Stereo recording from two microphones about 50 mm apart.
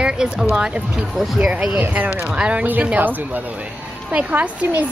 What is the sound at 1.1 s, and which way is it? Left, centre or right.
Speech, centre.